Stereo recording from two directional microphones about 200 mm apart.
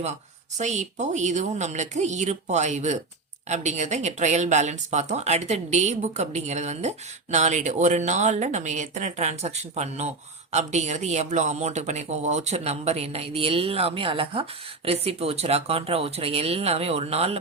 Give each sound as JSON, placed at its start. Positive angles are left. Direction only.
{"t": 0.6, "sound": "speech", "side_deg": -35}